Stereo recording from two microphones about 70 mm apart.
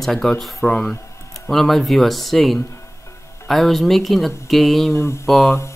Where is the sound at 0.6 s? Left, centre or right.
Centre.